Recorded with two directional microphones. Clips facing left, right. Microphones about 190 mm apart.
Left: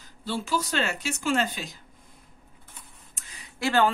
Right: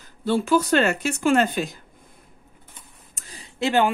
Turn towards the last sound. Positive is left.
turn(degrees=-15)  # may be behind; listen again after turning